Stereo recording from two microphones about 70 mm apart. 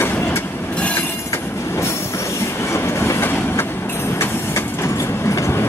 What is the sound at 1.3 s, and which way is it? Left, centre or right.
Train, left.